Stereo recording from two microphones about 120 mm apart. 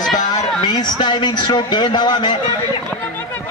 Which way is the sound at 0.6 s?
40° left (ahead or behind).